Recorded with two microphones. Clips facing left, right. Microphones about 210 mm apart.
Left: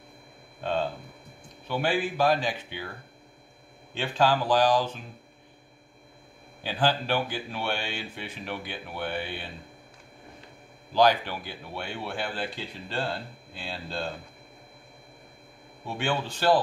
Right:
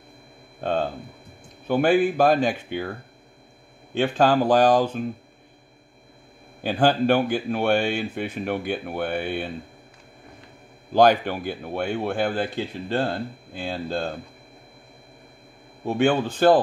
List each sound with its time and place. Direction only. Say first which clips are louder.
0.6 s speech: right 4 dB; 45° right (ahead or behind)
3.9 s speech: right 6 dB; 45° right (ahead or behind)
6.6 s speech: right 7 dB; 50° right (ahead or behind)
10.9 s speech: right 5 dB; 50° right (ahead or behind)
15.8 s speech: right 9 dB; 45° right (ahead or behind)